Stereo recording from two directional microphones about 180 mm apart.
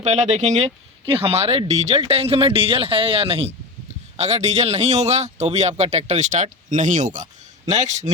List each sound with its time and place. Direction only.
0.0 s speech: 40° right (ahead or behind)